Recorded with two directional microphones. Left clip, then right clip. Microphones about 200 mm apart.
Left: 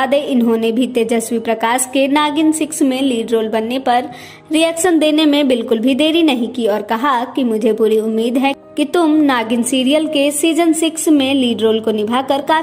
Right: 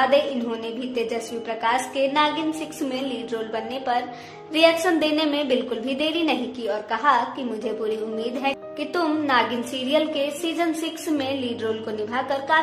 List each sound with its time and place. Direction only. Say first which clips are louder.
0.0 s a woman's voice: left 5 dB; 40° left (ahead or behind)